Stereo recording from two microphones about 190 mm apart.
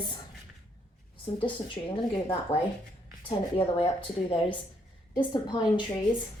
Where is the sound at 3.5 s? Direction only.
30° left (ahead or behind).